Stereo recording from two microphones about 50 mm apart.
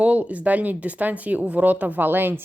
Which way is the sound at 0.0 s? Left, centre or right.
Right.